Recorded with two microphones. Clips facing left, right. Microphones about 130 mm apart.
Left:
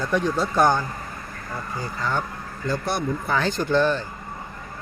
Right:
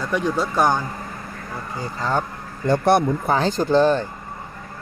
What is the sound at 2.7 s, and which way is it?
Speech, 70° right (ahead or behind).